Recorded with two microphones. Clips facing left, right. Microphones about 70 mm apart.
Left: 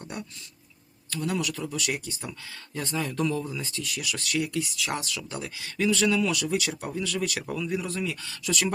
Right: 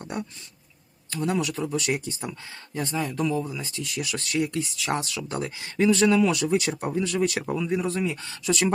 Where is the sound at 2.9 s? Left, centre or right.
Centre.